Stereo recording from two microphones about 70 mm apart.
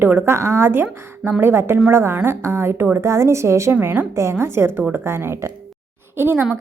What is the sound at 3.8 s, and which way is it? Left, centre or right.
Speech, right.